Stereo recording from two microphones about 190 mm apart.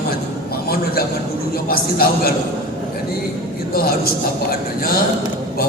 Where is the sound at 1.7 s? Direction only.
50° left (ahead or behind).